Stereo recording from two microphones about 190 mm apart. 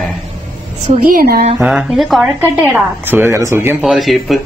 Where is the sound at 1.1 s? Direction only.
55° right (ahead or behind).